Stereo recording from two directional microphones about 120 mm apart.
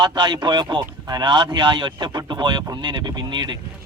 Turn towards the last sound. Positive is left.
turn(degrees=-40)  # may be behind; listen again after turning